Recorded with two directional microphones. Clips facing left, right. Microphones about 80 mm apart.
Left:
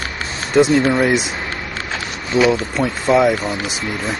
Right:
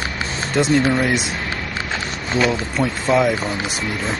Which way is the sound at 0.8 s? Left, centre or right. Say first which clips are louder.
Left 3 dB; centre.